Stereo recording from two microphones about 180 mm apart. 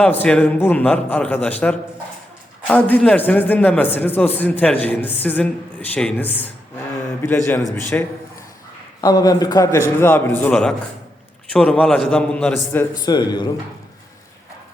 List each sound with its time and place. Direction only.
0.0 s a man's voice: 10° left (ahead or behind)
12.7 s speech: 20° left (ahead or behind)